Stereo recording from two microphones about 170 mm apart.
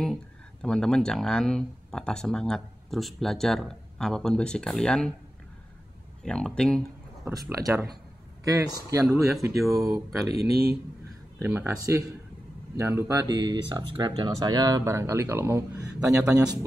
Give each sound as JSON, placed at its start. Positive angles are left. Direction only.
{"t": 0.0, "sound": "speech", "side_deg": 5}
{"t": 6.2, "sound": "speech", "side_deg": 5}
{"t": 7.2, "sound": "speech", "side_deg": -15}
{"t": 11.3, "sound": "speech", "side_deg": -15}